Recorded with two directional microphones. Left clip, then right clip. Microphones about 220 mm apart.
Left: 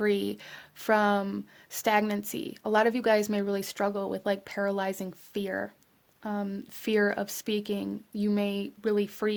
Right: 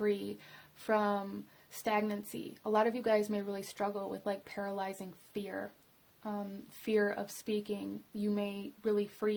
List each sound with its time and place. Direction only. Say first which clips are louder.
0.0 s speech: left 7 dB; 40° left (ahead or behind)
6.8 s speech: left 6 dB; 45° left (ahead or behind)